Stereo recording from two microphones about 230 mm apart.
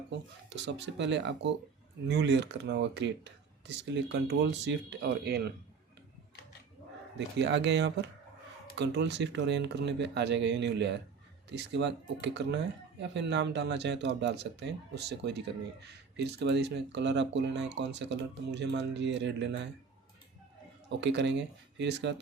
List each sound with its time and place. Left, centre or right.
0.1 s speech: right
7.3 s speech: right
21.0 s speech: right